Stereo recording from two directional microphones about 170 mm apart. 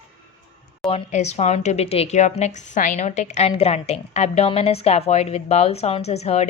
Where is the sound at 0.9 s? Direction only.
40° left (ahead or behind).